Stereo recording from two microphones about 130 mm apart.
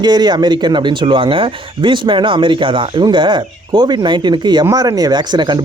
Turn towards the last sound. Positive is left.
turn(degrees=-35)  # may be behind; listen again after turning